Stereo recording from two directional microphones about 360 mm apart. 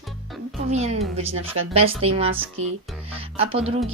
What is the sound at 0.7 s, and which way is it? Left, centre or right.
A woman's voice, centre.